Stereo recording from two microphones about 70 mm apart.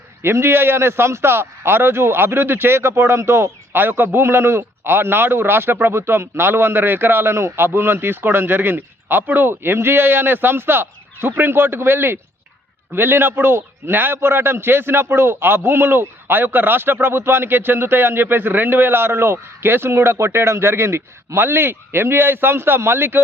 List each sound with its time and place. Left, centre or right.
0.2 s a man's voice: right